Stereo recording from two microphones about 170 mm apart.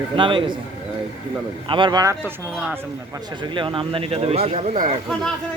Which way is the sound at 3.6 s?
30° right (ahead or behind).